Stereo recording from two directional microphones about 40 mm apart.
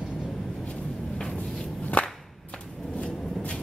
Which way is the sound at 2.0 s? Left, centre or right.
Left.